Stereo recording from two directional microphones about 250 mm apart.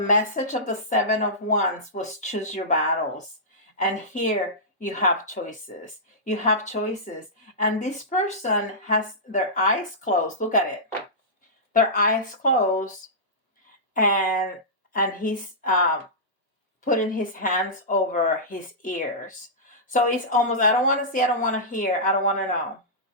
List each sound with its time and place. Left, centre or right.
0.1 s speech: left
3.8 s speech: left
11.7 s speech: left
13.9 s speech: left
16.8 s speech: left